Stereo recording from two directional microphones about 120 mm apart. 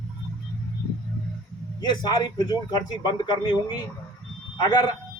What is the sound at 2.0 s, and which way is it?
Speech, 35° left (ahead or behind).